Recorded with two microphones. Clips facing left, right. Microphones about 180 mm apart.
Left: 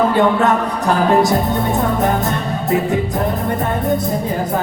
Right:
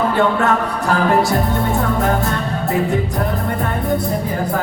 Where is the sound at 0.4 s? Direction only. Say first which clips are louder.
Left 2 dB; 20° left (ahead or behind).